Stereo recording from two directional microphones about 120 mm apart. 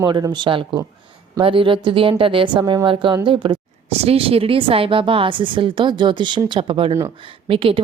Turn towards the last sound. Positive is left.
turn(degrees=-50)  # may be behind; listen again after turning